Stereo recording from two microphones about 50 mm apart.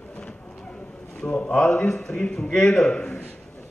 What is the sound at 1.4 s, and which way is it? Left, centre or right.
A man's voice, left.